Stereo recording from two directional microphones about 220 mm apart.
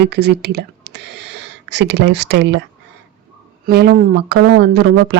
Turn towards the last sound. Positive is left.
turn(degrees=-45)  # may be behind; listen again after turning